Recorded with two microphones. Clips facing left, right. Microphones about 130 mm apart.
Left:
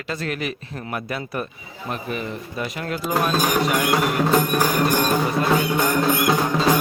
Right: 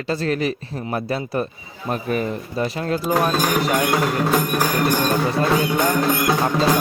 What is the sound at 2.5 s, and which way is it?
Speech, 30° right (ahead or behind).